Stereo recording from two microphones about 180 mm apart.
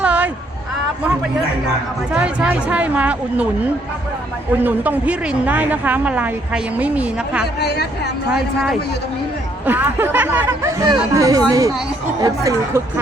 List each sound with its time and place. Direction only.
0.0 s a sound: 10° right (ahead or behind)
2.1 s speech: 5° right (ahead or behind)
4.6 s speech: 10° right (ahead or behind)
7.4 s speech: 65° left (ahead or behind)
9.6 s speech: 10° right (ahead or behind)